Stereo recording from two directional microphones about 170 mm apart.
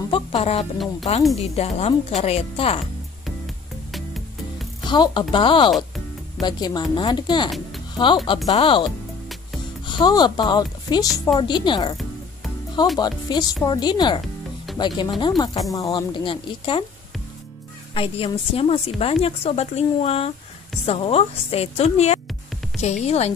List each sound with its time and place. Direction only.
0.1 s music: 35° left (ahead or behind)
1.1 s speech: 35° left (ahead or behind)
3.9 s music: centre (ahead or behind)
4.8 s speech: 25° left (ahead or behind)
13.0 s speech: 25° left (ahead or behind)
17.9 s speech: 30° left (ahead or behind)